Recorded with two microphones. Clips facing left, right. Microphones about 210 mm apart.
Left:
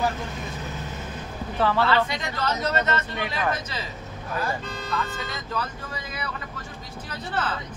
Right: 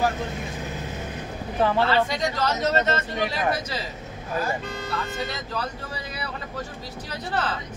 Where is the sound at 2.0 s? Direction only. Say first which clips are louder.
Right 3 dB; 40° right (ahead or behind).